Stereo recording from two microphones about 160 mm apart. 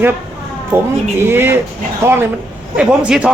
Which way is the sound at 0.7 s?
15° right (ahead or behind).